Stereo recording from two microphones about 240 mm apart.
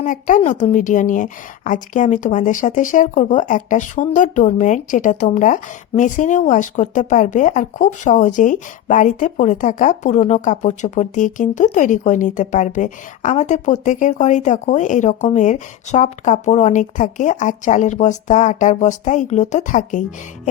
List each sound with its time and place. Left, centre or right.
0.0 s a woman's voice: left